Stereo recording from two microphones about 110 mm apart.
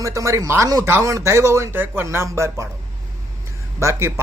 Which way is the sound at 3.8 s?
25° right (ahead or behind).